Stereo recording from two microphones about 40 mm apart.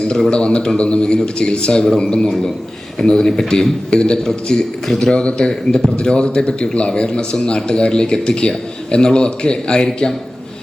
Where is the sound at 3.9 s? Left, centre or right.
Left.